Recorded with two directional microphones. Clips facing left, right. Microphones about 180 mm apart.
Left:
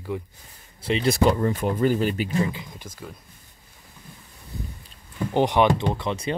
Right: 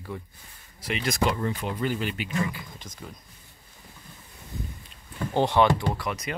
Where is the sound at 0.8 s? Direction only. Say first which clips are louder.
Left 6 dB; 30° left (ahead or behind).